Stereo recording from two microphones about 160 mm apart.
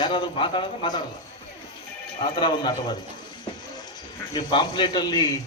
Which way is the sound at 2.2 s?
30° left (ahead or behind).